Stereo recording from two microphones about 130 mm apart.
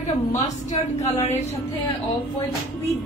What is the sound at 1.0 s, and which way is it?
Speech, 60° left (ahead or behind).